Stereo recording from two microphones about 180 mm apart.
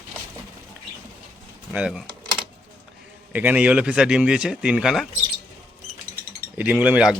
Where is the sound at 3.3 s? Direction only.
10° right (ahead or behind).